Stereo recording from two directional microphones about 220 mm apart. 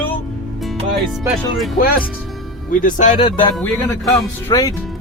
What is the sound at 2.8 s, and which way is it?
Speech, 35° left (ahead or behind).